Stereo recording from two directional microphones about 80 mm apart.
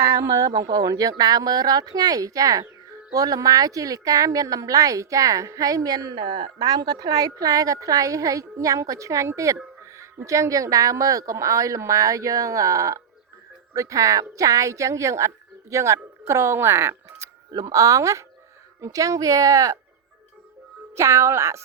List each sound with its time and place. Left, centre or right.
0.0 s a woman's voice: right
9.8 s music: right
10.2 s a woman's voice: right
17.5 s a woman's voice: right
20.9 s a woman's voice: right